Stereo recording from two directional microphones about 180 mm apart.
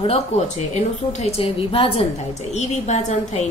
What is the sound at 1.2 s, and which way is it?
A woman's voice, 30° left (ahead or behind).